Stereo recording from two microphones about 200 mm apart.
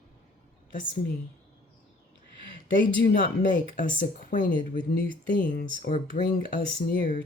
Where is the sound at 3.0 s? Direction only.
45° left (ahead or behind).